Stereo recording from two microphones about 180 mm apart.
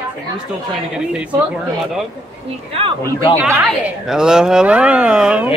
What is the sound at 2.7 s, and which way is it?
Speech, 35° right (ahead or behind).